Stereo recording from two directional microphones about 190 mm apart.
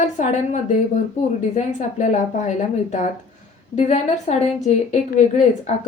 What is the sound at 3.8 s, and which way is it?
A woman's voice, 35° left (ahead or behind).